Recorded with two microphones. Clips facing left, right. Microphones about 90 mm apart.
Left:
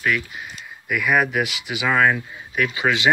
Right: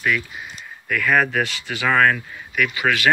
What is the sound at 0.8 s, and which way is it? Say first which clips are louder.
Speech: right 1 dB; 15° left (ahead or behind).